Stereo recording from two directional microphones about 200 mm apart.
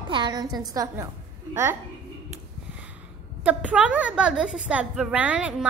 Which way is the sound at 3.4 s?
5° right (ahead or behind).